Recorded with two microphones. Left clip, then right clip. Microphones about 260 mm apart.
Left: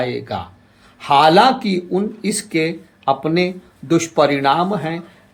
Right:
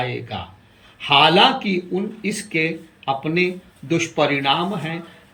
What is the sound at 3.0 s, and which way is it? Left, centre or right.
Speech, left.